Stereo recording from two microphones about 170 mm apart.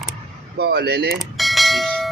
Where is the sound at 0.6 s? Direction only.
75° right (ahead or behind).